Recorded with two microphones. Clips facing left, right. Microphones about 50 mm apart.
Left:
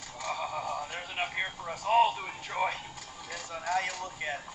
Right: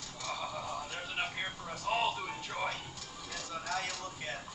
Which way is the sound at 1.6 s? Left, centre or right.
Left.